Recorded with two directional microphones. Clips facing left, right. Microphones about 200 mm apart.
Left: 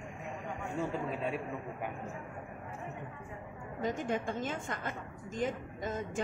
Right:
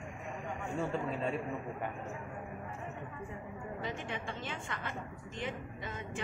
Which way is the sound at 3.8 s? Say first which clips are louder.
Left 9 dB; 45° left (ahead or behind).